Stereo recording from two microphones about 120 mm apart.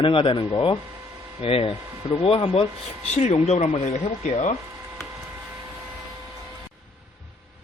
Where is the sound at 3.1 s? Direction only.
65° left (ahead or behind).